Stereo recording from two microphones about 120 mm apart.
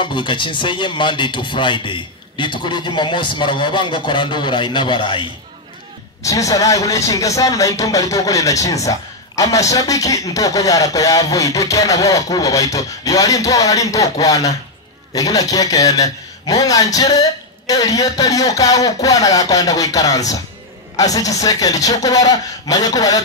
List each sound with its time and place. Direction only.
0.0 s speech: 40° left (ahead or behind)
6.2 s speech: 30° left (ahead or behind)